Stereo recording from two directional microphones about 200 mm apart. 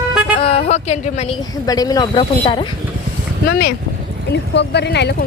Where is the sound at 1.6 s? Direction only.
20° left (ahead or behind).